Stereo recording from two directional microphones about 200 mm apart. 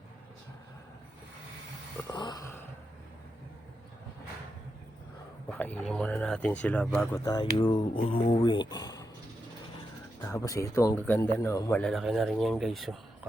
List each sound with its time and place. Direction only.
2.0 s a sound: 20° left (ahead or behind)
5.5 s speech: 10° left (ahead or behind)
7.3 s speech: 20° left (ahead or behind)
10.2 s speech: 15° left (ahead or behind); by 13.0 s centre (ahead or behind)